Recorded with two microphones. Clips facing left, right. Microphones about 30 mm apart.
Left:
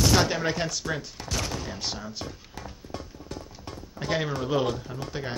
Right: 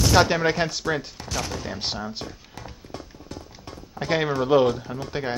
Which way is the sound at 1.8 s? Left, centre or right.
Right.